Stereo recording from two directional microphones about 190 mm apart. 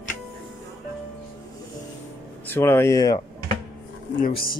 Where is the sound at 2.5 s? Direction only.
15° left (ahead or behind).